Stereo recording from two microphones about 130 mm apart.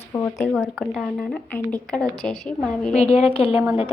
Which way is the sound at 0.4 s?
20° left (ahead or behind).